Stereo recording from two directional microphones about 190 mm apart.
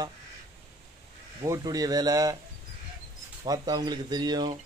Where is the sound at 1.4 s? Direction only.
20° right (ahead or behind).